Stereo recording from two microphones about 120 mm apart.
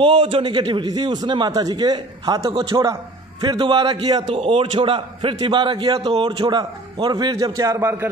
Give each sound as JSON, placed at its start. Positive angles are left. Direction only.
{"t": 0.0, "sound": "a man's voice", "side_deg": -50}